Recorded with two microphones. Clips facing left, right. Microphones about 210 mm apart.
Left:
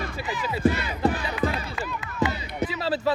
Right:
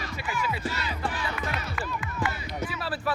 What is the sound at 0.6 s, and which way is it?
Speech, 50° left (ahead or behind).